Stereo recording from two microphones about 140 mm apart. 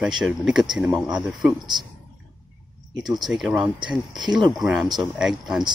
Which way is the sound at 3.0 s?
30° right (ahead or behind).